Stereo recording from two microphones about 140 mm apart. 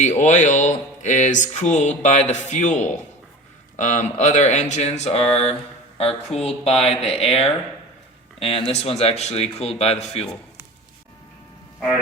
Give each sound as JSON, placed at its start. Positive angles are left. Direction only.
{"t": 0.2, "sound": "speech", "side_deg": 60}